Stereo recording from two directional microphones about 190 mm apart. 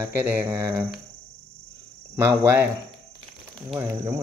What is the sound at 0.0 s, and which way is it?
Speech, 10° right (ahead or behind).